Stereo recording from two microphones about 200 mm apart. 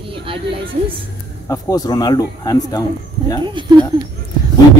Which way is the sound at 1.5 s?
15° left (ahead or behind).